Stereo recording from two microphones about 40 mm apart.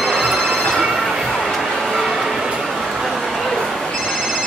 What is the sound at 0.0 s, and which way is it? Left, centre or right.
Telephone, centre.